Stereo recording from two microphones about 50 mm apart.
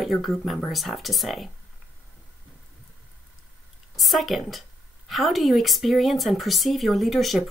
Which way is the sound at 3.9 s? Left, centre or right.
Centre.